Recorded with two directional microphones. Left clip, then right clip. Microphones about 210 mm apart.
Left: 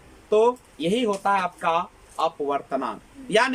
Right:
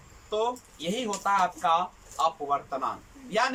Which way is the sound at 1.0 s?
45° left (ahead or behind).